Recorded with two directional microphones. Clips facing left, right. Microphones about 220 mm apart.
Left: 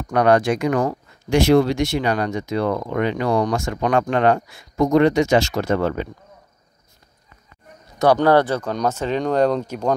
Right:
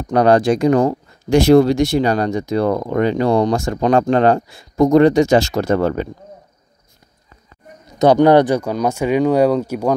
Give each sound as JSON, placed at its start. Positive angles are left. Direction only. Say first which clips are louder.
{"t": 0.1, "sound": "speech", "louder": "right 4 dB", "side_deg": -30}
{"t": 8.0, "sound": "speech", "louder": "right 5 dB", "side_deg": -20}